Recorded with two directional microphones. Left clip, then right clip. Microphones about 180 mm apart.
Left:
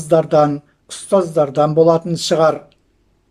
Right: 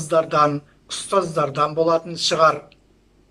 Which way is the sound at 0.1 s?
40° left (ahead or behind).